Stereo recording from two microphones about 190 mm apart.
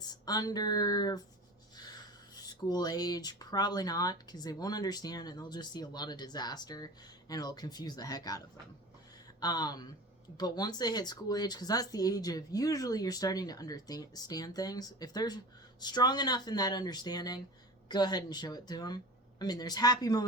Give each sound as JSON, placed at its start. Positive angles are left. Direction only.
{"t": 0.1, "sound": "speech", "side_deg": 20}
{"t": 9.4, "sound": "speech", "side_deg": 20}